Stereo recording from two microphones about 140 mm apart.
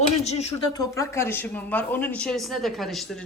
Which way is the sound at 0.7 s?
25° left (ahead or behind).